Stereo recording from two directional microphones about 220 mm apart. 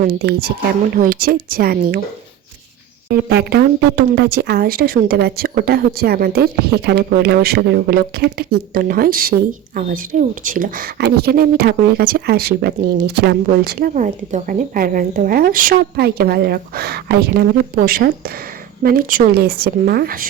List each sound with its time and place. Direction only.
0.0 s a woman's voice: 45° right (ahead or behind)
3.1 s a woman's voice: 50° right (ahead or behind)